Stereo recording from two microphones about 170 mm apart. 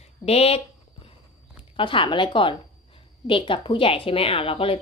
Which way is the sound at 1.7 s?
30° left (ahead or behind).